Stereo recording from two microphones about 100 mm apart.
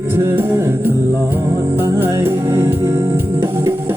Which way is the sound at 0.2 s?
25° right (ahead or behind).